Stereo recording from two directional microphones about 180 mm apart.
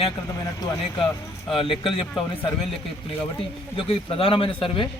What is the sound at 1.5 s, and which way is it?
Speech, 30° left (ahead or behind).